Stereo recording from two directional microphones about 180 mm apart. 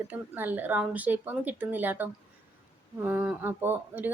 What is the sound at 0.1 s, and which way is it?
Speech, 10° right (ahead or behind).